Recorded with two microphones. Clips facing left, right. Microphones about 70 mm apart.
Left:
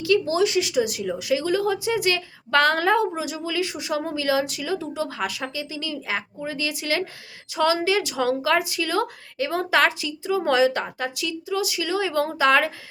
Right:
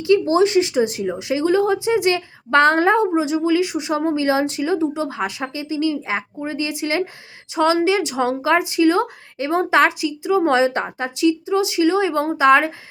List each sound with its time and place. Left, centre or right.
0.0 s a woman's voice: right